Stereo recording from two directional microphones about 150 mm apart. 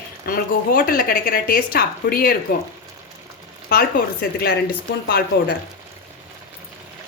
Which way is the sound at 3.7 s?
90° left.